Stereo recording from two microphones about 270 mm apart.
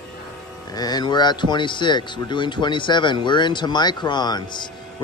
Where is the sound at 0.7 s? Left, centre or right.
Centre.